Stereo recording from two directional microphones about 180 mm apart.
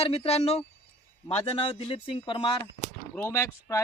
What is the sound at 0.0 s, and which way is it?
Speech, 35° left (ahead or behind).